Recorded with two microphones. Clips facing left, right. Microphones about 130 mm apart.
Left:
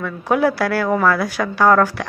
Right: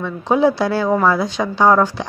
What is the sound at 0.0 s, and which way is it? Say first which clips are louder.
Speech: right 2 dB; 20° right (ahead or behind).